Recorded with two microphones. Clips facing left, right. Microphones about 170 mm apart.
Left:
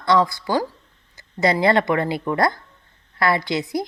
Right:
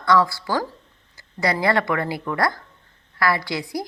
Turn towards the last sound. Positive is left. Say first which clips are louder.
# left 4 dB
turn(degrees=20)  # may be behind; listen again after turning